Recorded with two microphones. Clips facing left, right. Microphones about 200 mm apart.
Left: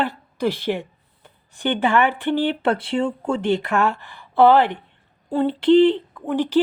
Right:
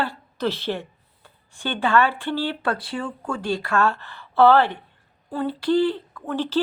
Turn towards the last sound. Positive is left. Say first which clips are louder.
# left 5 dB
turn(degrees=15)  # may be behind; listen again after turning